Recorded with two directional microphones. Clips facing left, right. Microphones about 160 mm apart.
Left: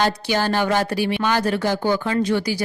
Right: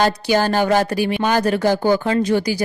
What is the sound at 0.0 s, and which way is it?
A woman's voice, 45° right (ahead or behind).